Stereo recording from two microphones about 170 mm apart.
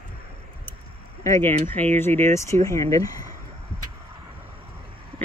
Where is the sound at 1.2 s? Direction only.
15° left (ahead or behind).